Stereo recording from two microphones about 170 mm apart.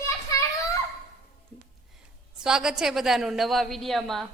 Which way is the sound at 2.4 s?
5° right (ahead or behind).